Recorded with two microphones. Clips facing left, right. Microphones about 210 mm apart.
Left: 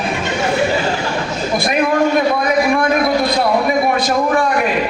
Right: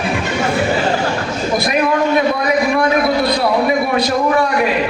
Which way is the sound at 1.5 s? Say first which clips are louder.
Even; 50° left (ahead or behind).